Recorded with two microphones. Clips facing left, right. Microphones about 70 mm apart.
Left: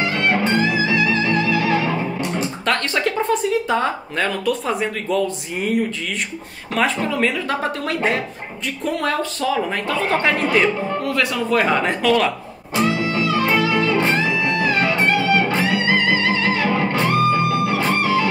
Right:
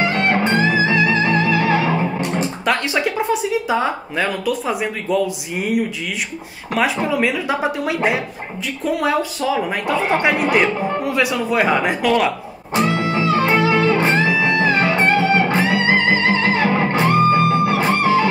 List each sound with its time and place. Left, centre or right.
0.0 s music: right
2.6 s a woman's voice: centre
13.1 s music: right